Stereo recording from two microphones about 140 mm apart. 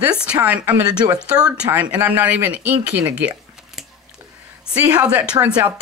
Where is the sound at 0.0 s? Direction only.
10° right (ahead or behind).